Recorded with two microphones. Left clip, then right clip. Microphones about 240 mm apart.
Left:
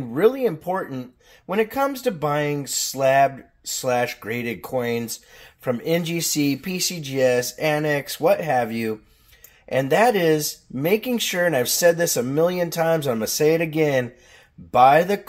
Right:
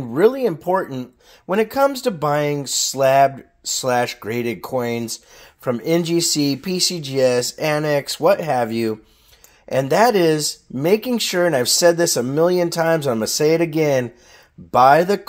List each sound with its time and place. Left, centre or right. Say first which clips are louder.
0.1 s speech: right 3 dB; right